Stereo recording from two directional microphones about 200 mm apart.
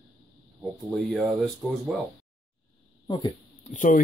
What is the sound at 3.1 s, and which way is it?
Speech, 20° left (ahead or behind).